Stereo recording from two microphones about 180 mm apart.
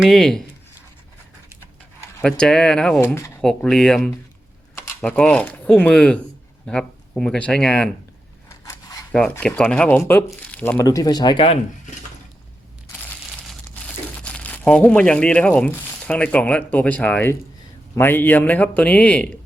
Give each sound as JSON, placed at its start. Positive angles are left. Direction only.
{"t": 0.0, "sound": "speech", "side_deg": 0}
{"t": 2.2, "sound": "speech", "side_deg": 5}
{"t": 8.4, "sound": "scissors", "side_deg": 15}
{"t": 9.1, "sound": "speech", "side_deg": 5}
{"t": 13.5, "sound": "speech", "side_deg": 5}